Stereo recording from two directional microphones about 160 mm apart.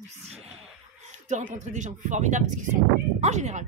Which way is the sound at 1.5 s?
50° right (ahead or behind).